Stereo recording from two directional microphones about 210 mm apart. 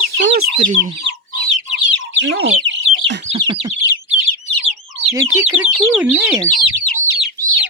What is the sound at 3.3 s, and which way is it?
Bird, 20° right (ahead or behind).